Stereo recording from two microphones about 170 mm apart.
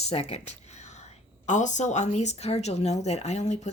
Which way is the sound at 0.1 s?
35° left (ahead or behind).